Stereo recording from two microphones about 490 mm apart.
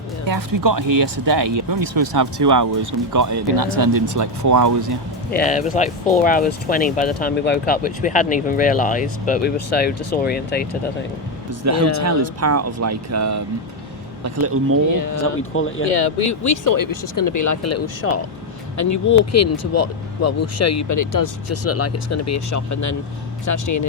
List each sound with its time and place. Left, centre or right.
0.3 s speech: right
1.4 s speech: right
5.3 s speech: centre
11.6 s speech: right
15.5 s speech: left
16.3 s speech: left
21.7 s speech: left